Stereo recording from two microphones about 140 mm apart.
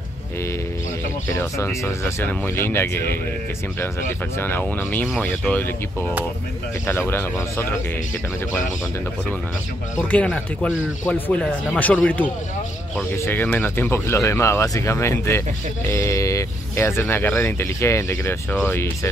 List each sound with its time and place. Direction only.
1.4 s speech: 20° left (ahead or behind)
4.4 s speech: 15° left (ahead or behind)
9.9 s speech: 10° left (ahead or behind)